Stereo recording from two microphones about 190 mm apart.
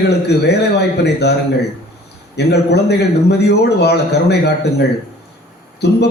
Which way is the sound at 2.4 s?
60° left (ahead or behind).